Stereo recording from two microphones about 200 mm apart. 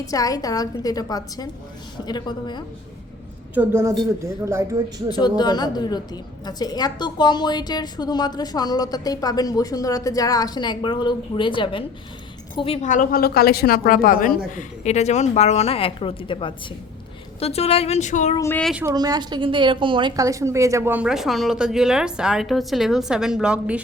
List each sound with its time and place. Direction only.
0.0 s a woman's voice: 15° left (ahead or behind)
3.5 s a woman's voice: 10° right (ahead or behind)
5.1 s a woman's voice: 20° left (ahead or behind); by 18.3 s 35° left (ahead or behind)
18.3 s a woman's voice: 10° left (ahead or behind)
18.6 s a woman's voice: 5° right (ahead or behind)
18.9 s a woman's voice: 20° right (ahead or behind)